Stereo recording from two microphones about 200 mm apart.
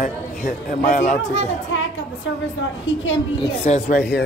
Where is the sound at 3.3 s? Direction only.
35° left (ahead or behind).